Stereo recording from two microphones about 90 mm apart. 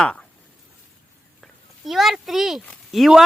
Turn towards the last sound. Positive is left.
turn(degrees=0)  # may be behind; listen again after turning